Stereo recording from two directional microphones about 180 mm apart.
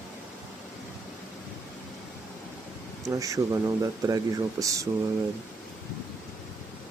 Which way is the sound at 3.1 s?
20° right (ahead or behind).